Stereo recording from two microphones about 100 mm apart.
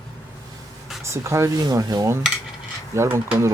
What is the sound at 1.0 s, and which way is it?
Speech, 30° right (ahead or behind).